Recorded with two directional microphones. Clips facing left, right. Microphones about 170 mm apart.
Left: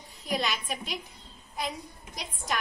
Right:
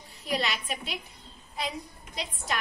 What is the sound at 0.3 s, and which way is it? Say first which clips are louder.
Speech: even; centre (ahead or behind).